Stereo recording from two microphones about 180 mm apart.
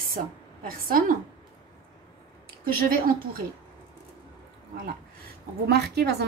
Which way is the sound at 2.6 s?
55° right (ahead or behind).